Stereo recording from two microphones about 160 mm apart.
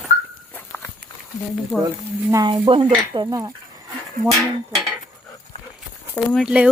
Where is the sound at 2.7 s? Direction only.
30° right (ahead or behind).